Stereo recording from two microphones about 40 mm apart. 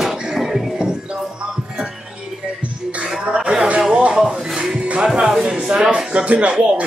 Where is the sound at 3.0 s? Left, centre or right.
Right.